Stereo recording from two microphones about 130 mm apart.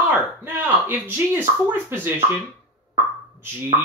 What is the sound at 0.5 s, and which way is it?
Speech, 15° right (ahead or behind).